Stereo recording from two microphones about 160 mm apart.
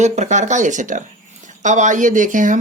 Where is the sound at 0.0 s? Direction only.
45° right (ahead or behind).